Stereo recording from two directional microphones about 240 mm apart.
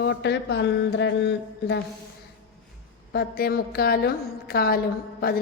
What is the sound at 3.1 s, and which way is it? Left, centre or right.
A woman's voice, left.